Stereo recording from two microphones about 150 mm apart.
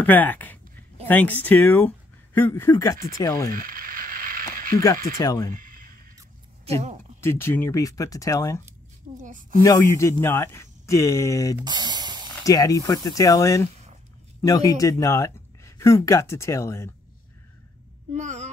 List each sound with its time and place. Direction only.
0.0 s speech: 10° left (ahead or behind)
3.5 s mechanisms: 70° right (ahead or behind)
5.1 s speech: 25° left (ahead or behind)
5.5 s a sound: 70° right (ahead or behind)
6.6 s speech: 45° right (ahead or behind)
7.2 s speech: 15° left (ahead or behind)
9.2 s speech: 60° right (ahead or behind)
9.6 s speech: 20° left (ahead or behind)
11.6 s spray: 30° right (ahead or behind)
12.4 s speech: 25° left (ahead or behind)
18.1 s a child's voice: 50° right (ahead or behind)